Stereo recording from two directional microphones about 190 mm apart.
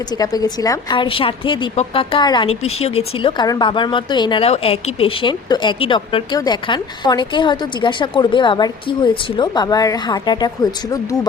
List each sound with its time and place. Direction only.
0.2 s speech: 20° left (ahead or behind)